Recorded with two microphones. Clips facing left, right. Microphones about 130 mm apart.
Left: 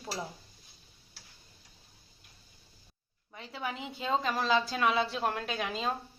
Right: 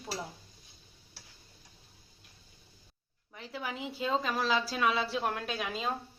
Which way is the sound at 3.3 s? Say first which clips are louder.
Left 1 dB; centre (ahead or behind).